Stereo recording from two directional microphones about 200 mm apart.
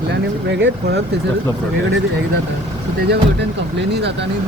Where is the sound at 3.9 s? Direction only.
55° right (ahead or behind).